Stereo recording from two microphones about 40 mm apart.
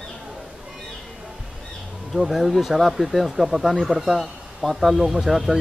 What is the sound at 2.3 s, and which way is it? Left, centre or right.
Speech, centre.